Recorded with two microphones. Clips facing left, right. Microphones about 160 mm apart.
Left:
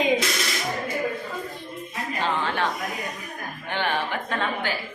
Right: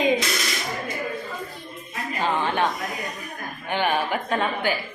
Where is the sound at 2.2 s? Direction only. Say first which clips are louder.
Right 3 dB; 15° right (ahead or behind).